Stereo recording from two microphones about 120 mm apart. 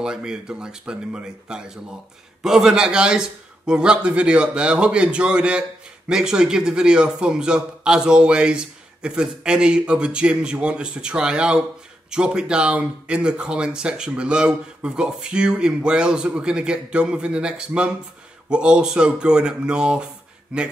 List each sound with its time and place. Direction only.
0.0 s a man's voice: 5° right (ahead or behind)